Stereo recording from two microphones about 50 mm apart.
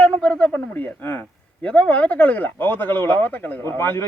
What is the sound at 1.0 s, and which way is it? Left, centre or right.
Speech, left.